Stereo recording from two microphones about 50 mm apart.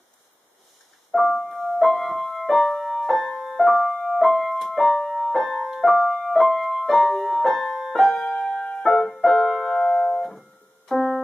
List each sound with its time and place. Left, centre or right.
1.2 s music: centre
8.5 s music: left
8.8 s piano: centre
10.9 s keyboard: centre